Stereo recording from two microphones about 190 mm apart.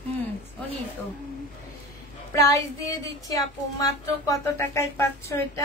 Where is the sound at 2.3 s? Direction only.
15° left (ahead or behind).